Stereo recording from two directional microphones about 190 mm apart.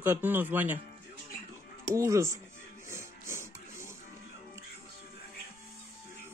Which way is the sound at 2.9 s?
15° right (ahead or behind).